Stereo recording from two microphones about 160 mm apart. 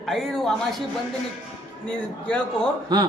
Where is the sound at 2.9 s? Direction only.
25° right (ahead or behind).